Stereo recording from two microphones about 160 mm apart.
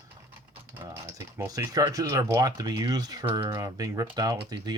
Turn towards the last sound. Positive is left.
turn(degrees=-25)  # may be behind; listen again after turning